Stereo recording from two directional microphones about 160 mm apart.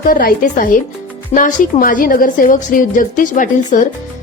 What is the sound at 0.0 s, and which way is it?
A woman's voice, 60° left (ahead or behind).